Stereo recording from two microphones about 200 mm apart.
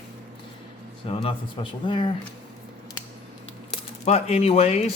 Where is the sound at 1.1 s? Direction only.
25° left (ahead or behind).